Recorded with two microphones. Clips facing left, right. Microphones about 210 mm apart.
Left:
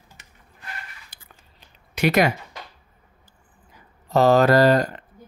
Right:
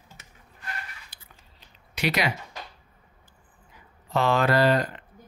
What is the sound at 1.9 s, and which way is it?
Speech, 50° left (ahead or behind).